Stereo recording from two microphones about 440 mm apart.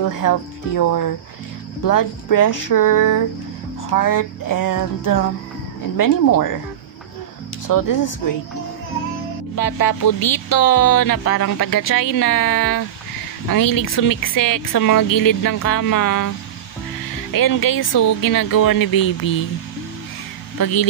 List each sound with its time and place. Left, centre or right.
0.0 s speech: left
7.6 s speech: left
9.6 s speech: left
17.3 s speech: left
20.5 s speech: left